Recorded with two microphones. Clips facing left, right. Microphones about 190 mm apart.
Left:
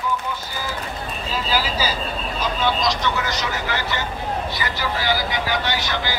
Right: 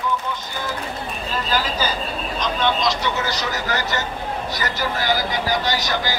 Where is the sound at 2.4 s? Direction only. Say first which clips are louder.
Right 1 dB; 5° left (ahead or behind).